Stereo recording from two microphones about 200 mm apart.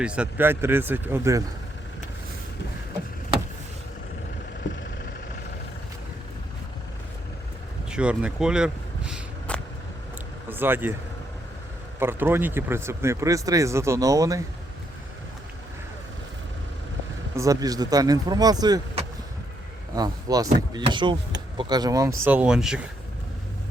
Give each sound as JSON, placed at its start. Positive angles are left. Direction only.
{"t": 0.0, "sound": "speech", "side_deg": -5}
{"t": 7.9, "sound": "a sound", "side_deg": -5}
{"t": 10.5, "sound": "speech", "side_deg": -10}
{"t": 11.9, "sound": "speech", "side_deg": -10}
{"t": 17.3, "sound": "speech", "side_deg": -15}